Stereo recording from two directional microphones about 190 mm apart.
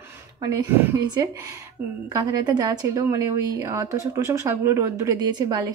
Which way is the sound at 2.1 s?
20° right (ahead or behind).